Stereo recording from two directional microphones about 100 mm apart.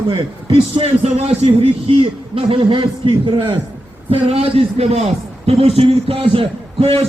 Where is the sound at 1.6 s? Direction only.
70° right (ahead or behind).